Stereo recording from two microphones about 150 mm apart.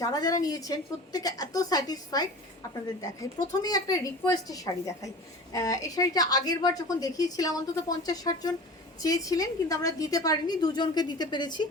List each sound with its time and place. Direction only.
0.0 s a woman's voice: 25° left (ahead or behind)
3.6 s a woman's voice: 25° left (ahead or behind)